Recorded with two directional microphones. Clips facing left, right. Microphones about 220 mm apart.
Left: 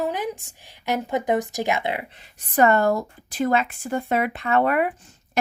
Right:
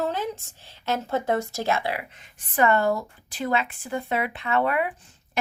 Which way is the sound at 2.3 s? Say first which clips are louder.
Left 3 dB; 40° left (ahead or behind).